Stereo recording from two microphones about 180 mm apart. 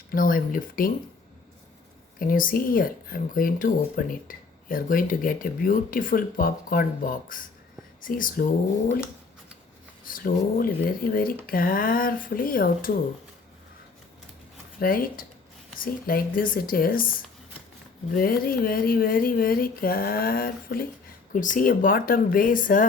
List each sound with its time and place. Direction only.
0.1 s speech: 50° left (ahead or behind)
2.1 s speech: 50° left (ahead or behind)
10.1 s speech: 50° left (ahead or behind)
14.8 s speech: 55° left (ahead or behind)
18.1 s speech: 55° left (ahead or behind)